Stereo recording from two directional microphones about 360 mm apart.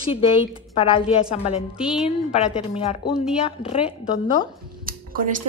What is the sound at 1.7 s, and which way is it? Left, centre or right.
Speech, centre.